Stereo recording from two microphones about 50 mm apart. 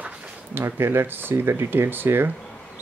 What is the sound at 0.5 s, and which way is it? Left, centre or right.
Speech, right.